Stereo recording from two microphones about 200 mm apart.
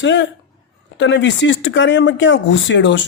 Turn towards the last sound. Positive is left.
turn(degrees=65)  # may be behind; listen again after turning